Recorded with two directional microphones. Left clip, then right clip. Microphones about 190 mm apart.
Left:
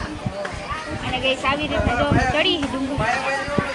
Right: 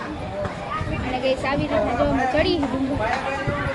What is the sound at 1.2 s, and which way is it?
A woman's voice, 5° left (ahead or behind).